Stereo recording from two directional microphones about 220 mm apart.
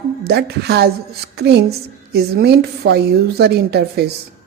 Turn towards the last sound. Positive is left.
turn(degrees=-50)  # may be behind; listen again after turning